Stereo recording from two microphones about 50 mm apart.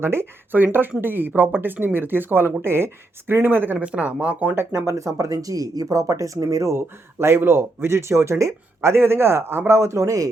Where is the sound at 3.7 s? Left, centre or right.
Right.